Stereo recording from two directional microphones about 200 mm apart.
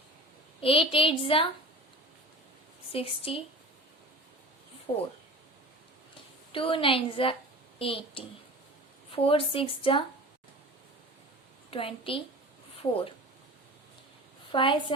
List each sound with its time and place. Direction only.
0.6 s a woman's voice: 25° left (ahead or behind)
2.9 s a woman's voice: 30° left (ahead or behind)
4.9 s a woman's voice: 30° left (ahead or behind)
6.5 s a woman's voice: 25° left (ahead or behind)
11.7 s a woman's voice: 25° left (ahead or behind)
14.5 s a woman's voice: 25° left (ahead or behind)